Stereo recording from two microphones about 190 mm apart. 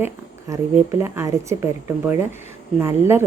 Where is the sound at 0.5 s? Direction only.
15° right (ahead or behind).